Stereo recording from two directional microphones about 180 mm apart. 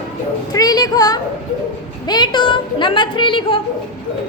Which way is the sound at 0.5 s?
20° left (ahead or behind).